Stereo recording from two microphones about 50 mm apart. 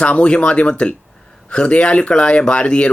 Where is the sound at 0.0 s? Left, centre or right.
Left.